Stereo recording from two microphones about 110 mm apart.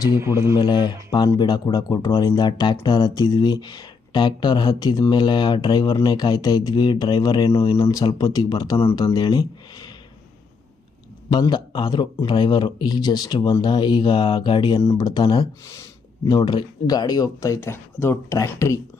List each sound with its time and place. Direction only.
0.2 s speech: 25° right (ahead or behind)
0.5 s speech: 40° left (ahead or behind)
7.6 s speech: 60° left (ahead or behind)
7.9 s speech: 35° left (ahead or behind)
11.3 s a man's voice: 40° left (ahead or behind)
15.6 s a sound: 25° left (ahead or behind)
16.4 s speech: 40° left (ahead or behind); by 18.8 s 25° left (ahead or behind)